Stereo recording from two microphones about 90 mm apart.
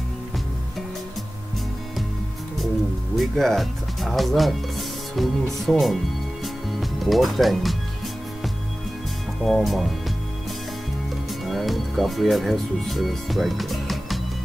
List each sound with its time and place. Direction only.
3.2 s speech: centre (ahead or behind)
6.4 s music: centre (ahead or behind)
9.4 s speech: centre (ahead or behind)
11.2 s speech: centre (ahead or behind)